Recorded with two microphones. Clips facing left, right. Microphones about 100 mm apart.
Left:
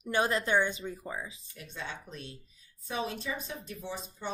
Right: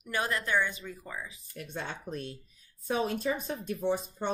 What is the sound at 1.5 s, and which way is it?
Speech, 50° right (ahead or behind).